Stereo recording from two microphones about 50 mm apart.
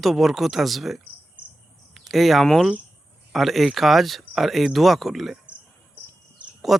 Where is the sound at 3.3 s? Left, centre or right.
Centre.